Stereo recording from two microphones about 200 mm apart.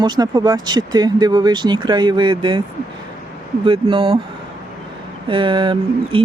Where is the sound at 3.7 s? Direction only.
25° right (ahead or behind).